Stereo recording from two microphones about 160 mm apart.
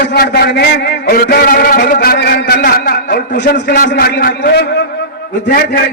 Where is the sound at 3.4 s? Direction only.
65° left (ahead or behind); by 4.8 s 90° left.